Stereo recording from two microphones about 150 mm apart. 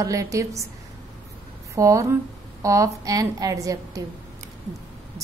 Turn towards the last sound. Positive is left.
turn(degrees=-20)  # may be behind; listen again after turning